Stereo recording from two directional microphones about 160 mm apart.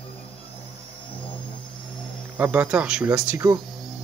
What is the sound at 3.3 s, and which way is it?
Speech, 20° right (ahead or behind).